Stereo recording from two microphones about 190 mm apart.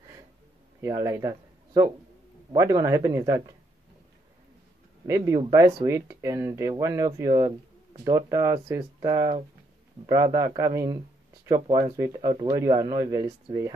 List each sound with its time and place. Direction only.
0.7 s speech: 15° right (ahead or behind)
1.3 s a sound: 20° right (ahead or behind)
2.5 s speech: 15° right (ahead or behind)
5.0 s speech: 15° right (ahead or behind)